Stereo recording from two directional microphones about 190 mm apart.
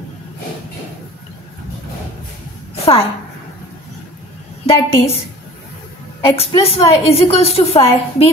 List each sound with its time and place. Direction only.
2.7 s a sound: 30° left (ahead or behind)
4.6 s a woman's voice: 30° left (ahead or behind)
6.2 s a woman's voice: 30° left (ahead or behind)